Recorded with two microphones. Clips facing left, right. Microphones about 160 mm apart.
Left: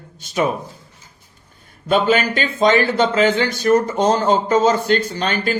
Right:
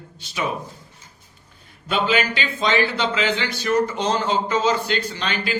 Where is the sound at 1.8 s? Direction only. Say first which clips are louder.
Left 5 dB; 45° left (ahead or behind).